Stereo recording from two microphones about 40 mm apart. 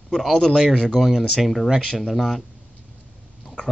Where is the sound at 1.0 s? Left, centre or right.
Centre.